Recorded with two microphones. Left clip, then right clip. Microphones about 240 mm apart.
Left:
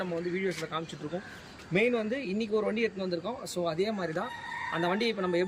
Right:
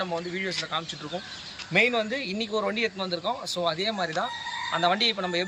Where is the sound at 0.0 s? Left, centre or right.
Centre.